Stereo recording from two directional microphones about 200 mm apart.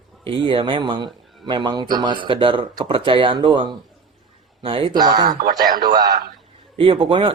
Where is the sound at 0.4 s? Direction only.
25° right (ahead or behind).